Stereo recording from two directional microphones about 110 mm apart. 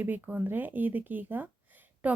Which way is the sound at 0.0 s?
15° right (ahead or behind).